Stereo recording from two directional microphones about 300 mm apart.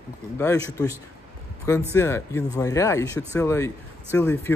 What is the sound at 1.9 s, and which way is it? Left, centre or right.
Speech, centre.